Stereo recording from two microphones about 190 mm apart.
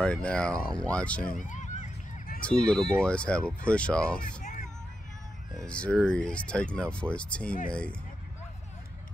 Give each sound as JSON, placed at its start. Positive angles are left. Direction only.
{"t": 0.0, "sound": "speech", "side_deg": 5}
{"t": 1.4, "sound": "a sound", "side_deg": 40}
{"t": 2.7, "sound": "speech", "side_deg": 5}
{"t": 4.4, "sound": "music", "side_deg": 45}
{"t": 5.6, "sound": "speech", "side_deg": 5}